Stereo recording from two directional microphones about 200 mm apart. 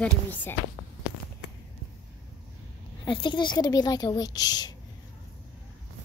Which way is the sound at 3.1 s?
25° left (ahead or behind).